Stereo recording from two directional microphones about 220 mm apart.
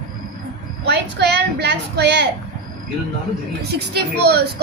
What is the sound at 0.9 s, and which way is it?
A woman's voice, 50° right (ahead or behind).